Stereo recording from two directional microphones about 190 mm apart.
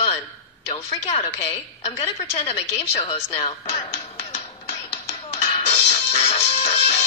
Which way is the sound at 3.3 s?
35° left (ahead or behind).